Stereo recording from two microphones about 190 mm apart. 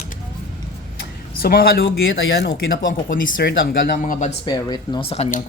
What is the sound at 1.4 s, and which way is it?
Speech, 55° left (ahead or behind).